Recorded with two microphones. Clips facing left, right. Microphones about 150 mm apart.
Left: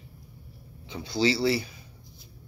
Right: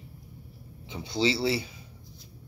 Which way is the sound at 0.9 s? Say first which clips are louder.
Left 2 dB; 25° right (ahead or behind).